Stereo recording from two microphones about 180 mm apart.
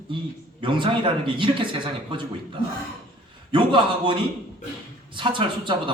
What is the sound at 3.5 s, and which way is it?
A man's voice, 25° right (ahead or behind).